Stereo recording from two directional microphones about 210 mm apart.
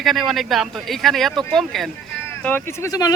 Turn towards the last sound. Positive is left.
turn(degrees=15)  # may be behind; listen again after turning